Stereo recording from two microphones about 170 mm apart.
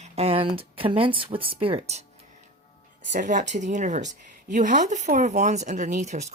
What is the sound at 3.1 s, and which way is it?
Speech, 45° right (ahead or behind).